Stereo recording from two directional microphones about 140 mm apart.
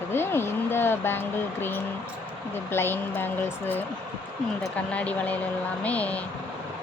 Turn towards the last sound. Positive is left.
turn(degrees=10)  # may be behind; listen again after turning